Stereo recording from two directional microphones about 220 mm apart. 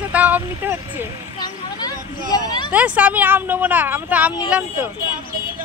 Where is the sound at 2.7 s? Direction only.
5° right (ahead or behind).